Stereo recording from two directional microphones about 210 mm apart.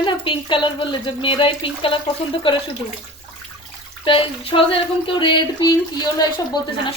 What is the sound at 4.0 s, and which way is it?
Speech, 25° left (ahead or behind).